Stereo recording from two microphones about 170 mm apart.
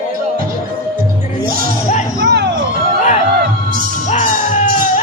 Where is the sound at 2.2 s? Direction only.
90° right.